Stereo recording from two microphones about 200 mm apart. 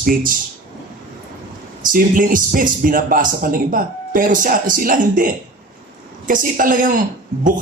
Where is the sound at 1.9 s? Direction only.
45° right (ahead or behind).